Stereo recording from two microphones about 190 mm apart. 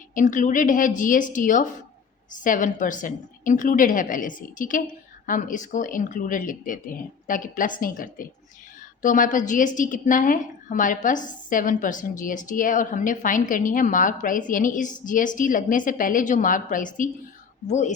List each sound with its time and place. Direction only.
0.1 s a woman's voice: 45° left (ahead or behind)